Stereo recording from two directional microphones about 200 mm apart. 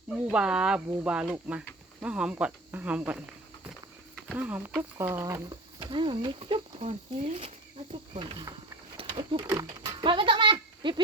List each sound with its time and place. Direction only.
0.3 s speech: 5° right (ahead or behind); by 8.5 s 25° right (ahead or behind)
9.0 s a sound: 25° right (ahead or behind)
9.6 s speech: 20° right (ahead or behind)